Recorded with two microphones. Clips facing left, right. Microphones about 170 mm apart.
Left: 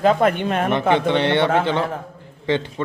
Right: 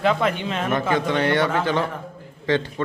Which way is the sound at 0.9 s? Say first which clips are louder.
Even; 25° left (ahead or behind).